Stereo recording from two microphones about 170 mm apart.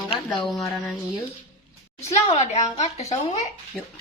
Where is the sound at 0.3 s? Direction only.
Centre (ahead or behind).